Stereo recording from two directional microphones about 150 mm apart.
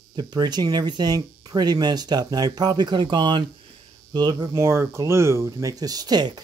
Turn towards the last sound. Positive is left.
turn(degrees=-25)  # may be behind; listen again after turning